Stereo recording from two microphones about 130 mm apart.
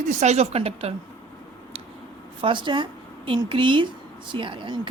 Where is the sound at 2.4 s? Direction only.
40° right (ahead or behind).